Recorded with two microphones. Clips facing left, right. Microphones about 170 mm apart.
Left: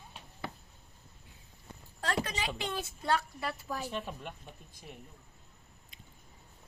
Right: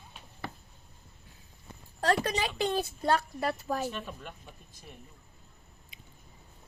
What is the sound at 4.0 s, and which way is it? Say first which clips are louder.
Speech: left 1 dB; 20° left (ahead or behind).